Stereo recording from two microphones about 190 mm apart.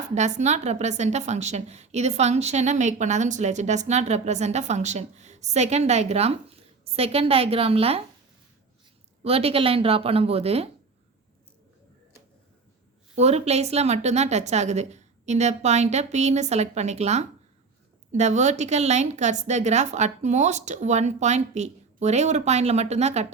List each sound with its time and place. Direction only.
0.1 s a woman's voice: 40° right (ahead or behind)
9.2 s a woman's voice: 30° right (ahead or behind)
13.1 s a woman's voice: 35° right (ahead or behind)